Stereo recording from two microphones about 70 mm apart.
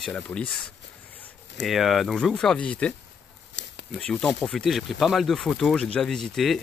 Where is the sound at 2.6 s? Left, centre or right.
Left.